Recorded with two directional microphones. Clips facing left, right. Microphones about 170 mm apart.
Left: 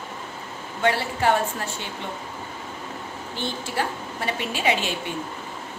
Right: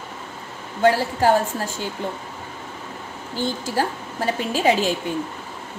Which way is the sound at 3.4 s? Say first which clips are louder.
Right 5 dB; 40° right (ahead or behind).